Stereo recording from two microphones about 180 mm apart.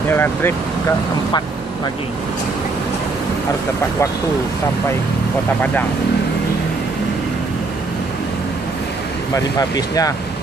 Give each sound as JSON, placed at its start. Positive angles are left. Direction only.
{"t": 0.1, "sound": "speech", "side_deg": 10}
{"t": 9.3, "sound": "speech", "side_deg": 20}